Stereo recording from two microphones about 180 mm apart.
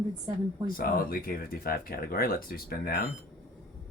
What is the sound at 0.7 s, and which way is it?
Speech, 55° left (ahead or behind).